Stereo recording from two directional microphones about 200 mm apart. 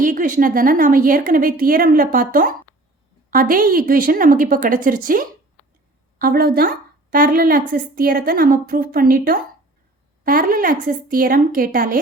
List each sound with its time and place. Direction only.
0.0 s a woman's voice: 40° right (ahead or behind)